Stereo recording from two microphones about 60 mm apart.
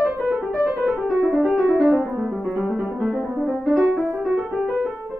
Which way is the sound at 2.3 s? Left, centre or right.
Centre.